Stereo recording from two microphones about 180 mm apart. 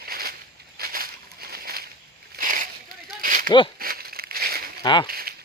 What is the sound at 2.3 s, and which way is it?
Splash, 50° right (ahead or behind).